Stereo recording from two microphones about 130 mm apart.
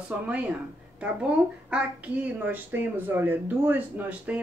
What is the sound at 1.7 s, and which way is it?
Speech, 10° right (ahead or behind).